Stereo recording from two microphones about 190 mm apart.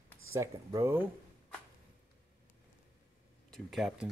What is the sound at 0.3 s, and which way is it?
Speech, 15° right (ahead or behind).